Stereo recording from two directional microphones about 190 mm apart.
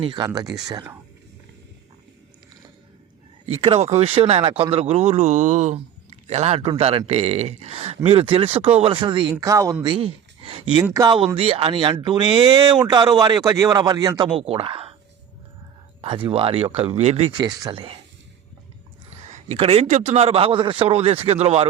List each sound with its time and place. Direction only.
0.0 s speech: 25° right (ahead or behind)
3.4 s speech: 30° right (ahead or behind)
9.3 s speech: 15° right (ahead or behind)
10.8 s speech: 15° right (ahead or behind)
16.0 s speech: 25° right (ahead or behind)
19.2 s speech: 35° right (ahead or behind)